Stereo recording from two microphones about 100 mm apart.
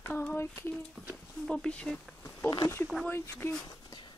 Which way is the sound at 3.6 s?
45° left (ahead or behind).